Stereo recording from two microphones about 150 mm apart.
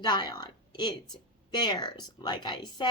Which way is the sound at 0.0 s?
30° left (ahead or behind).